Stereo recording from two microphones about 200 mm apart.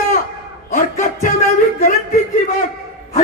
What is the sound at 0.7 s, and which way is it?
Speech, 40° left (ahead or behind).